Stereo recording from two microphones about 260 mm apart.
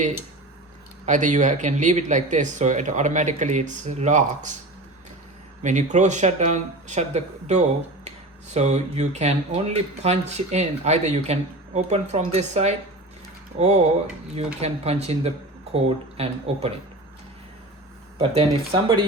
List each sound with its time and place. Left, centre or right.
1.0 s speech: right
5.6 s speech: right
18.2 s speech: right